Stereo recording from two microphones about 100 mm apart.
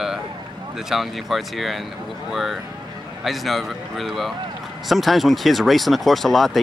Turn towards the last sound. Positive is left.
turn(degrees=0)  # may be behind; listen again after turning